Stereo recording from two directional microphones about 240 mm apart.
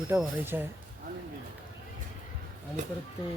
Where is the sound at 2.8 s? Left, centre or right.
Right.